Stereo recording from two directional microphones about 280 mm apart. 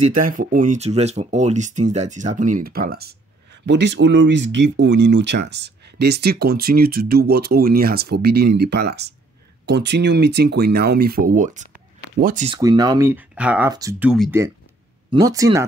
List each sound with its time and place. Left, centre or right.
0.4 s speech: right
12.4 s speech: centre